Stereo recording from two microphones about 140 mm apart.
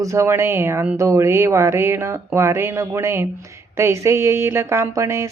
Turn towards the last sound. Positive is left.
turn(degrees=-20)  # may be behind; listen again after turning